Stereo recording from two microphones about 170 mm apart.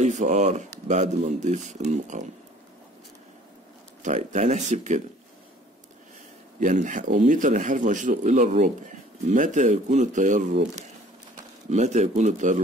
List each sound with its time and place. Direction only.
0.0 s speech: 45° right (ahead or behind)
4.0 s speech: 45° right (ahead or behind)
6.6 s speech: 50° right (ahead or behind)